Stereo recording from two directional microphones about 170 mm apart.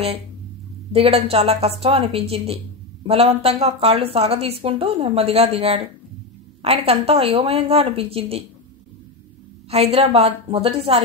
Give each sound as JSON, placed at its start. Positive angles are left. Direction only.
{"t": 0.9, "sound": "speech", "side_deg": -35}
{"t": 9.7, "sound": "speech", "side_deg": -35}